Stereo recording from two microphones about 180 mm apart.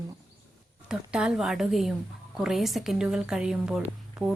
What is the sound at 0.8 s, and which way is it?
A woman's voice, 5° right (ahead or behind).